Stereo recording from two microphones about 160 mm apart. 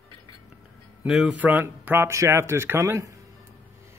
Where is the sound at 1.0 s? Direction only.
5° right (ahead or behind); by 3.2 s 20° right (ahead or behind).